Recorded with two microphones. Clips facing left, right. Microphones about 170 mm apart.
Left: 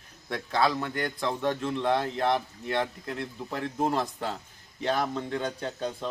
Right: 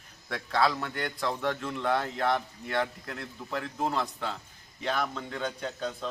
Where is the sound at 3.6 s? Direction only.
40° left (ahead or behind).